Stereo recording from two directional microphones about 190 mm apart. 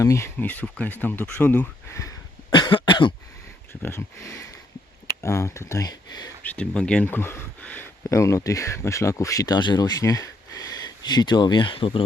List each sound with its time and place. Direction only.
0.0 s speech: 15° left (ahead or behind)
3.7 s speech: 15° left (ahead or behind)
6.4 s speech: 10° left (ahead or behind); by 12.0 s 30° left (ahead or behind)